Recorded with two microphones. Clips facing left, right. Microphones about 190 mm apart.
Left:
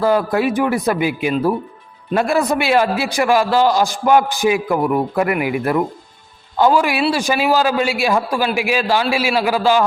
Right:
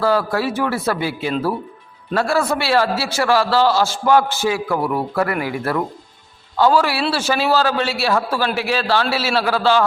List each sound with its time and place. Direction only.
0.0 s a man's voice: 20° left (ahead or behind)